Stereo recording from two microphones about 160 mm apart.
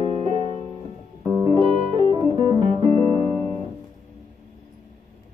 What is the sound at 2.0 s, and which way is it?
Music, 30° right (ahead or behind).